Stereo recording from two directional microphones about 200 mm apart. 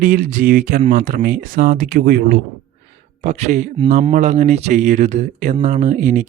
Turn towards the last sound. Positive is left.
turn(degrees=-40)  # may be behind; listen again after turning